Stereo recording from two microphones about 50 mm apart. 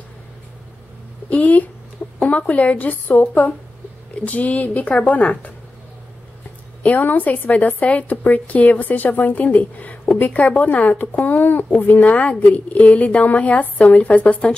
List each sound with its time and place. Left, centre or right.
1.3 s a woman's voice: left
6.8 s a woman's voice: left